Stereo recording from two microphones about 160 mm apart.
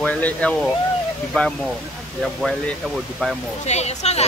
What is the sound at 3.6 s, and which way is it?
Speech, 45° left (ahead or behind).